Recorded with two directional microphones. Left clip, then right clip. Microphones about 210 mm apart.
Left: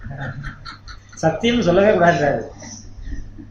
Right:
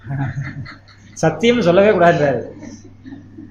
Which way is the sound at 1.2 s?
50° right (ahead or behind).